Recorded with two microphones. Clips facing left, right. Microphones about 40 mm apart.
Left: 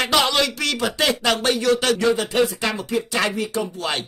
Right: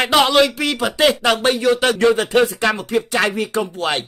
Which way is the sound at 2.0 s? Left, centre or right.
Right.